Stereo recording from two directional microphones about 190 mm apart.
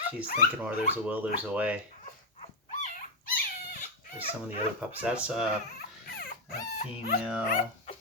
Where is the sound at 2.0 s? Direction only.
40° left (ahead or behind).